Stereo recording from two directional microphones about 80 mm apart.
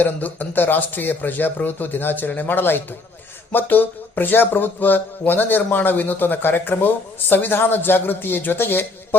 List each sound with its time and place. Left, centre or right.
0.0 s speech: left